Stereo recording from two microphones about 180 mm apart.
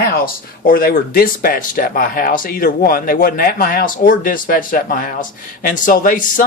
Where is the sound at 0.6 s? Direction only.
55° left (ahead or behind).